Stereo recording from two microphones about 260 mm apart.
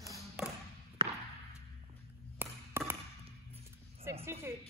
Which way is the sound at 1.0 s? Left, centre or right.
Centre.